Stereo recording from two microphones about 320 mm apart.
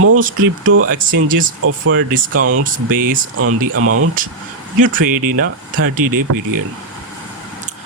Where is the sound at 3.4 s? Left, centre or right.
Right.